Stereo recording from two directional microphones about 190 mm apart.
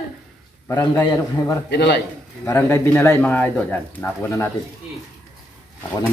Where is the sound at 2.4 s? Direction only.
15° left (ahead or behind).